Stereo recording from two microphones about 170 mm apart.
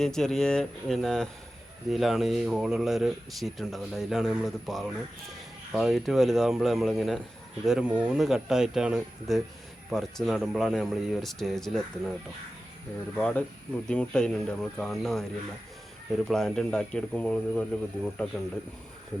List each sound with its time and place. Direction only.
0.0 s speech: 5° left (ahead or behind)
13.1 s speech: 5° left (ahead or behind)
16.3 s speech: 5° left (ahead or behind)